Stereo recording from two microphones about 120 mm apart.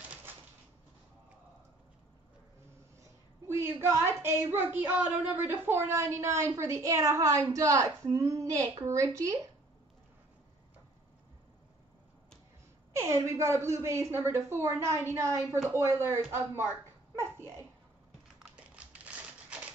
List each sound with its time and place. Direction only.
3.0 s a woman's voice: 25° right (ahead or behind)
12.9 s a woman's voice: 25° right (ahead or behind)
17.1 s a sound: 20° right (ahead or behind)